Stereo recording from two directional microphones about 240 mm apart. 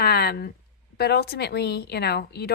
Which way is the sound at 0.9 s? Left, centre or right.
Left.